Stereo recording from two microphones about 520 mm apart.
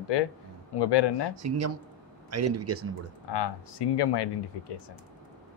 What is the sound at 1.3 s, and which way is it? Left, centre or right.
Speech, right.